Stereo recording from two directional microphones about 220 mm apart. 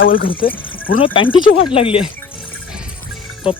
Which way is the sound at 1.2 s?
25° left (ahead or behind).